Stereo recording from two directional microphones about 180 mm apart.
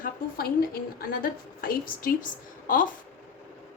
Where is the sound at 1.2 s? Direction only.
55° left (ahead or behind).